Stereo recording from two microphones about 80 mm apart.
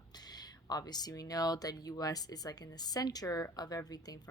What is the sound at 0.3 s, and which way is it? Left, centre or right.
Speech, left.